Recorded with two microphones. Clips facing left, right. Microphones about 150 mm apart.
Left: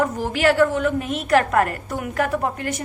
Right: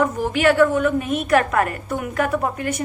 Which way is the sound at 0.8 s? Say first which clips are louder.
Right 2 dB; 45° right (ahead or behind).